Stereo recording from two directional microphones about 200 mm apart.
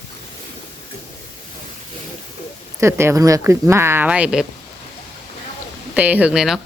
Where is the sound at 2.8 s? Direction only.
10° right (ahead or behind).